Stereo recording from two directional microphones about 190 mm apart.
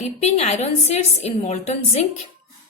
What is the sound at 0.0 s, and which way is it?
A woman's voice, 35° left (ahead or behind).